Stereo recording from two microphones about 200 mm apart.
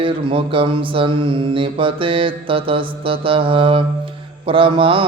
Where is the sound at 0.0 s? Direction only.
25° right (ahead or behind).